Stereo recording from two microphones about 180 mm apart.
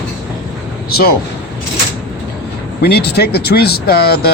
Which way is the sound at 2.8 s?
65° left (ahead or behind).